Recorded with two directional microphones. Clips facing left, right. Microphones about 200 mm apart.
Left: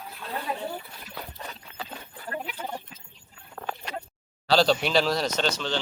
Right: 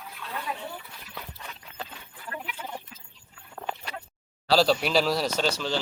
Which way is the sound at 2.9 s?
20° left (ahead or behind).